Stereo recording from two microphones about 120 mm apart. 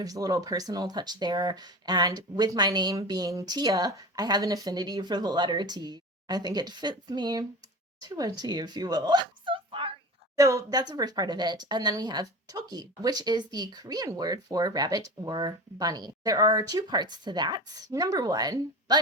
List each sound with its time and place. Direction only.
0.0 s speech: 30° right (ahead or behind); by 9.9 s 45° right (ahead or behind)
10.3 s speech: 30° right (ahead or behind)